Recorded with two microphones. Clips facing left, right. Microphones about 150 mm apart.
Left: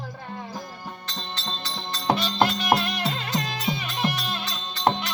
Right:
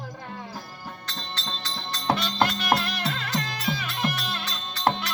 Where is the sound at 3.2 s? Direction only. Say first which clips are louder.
Left 2 dB; 20° left (ahead or behind).